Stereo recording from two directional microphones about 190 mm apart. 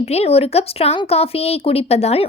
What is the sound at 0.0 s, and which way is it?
Speech, 35° left (ahead or behind).